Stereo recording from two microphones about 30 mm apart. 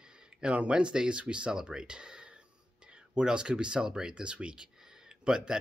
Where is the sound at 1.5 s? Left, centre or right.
Right.